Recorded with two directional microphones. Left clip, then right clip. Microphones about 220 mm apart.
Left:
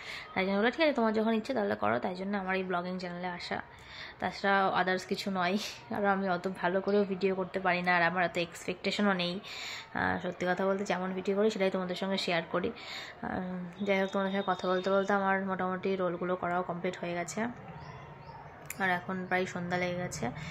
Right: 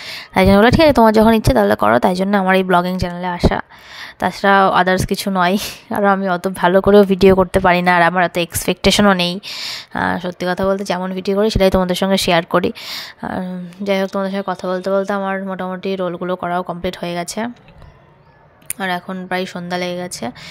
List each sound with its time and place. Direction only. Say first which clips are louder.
0.0 s speech: right 18 dB; 50° right (ahead or behind)
18.8 s speech: right 10 dB; 45° right (ahead or behind)